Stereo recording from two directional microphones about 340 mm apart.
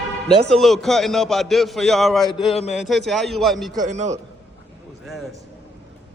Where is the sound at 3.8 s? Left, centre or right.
Centre.